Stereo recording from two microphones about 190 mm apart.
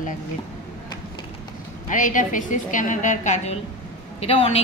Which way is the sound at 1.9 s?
45° left (ahead or behind).